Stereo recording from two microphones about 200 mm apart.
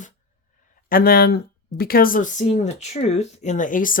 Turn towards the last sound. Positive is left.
turn(degrees=40)  # may be behind; listen again after turning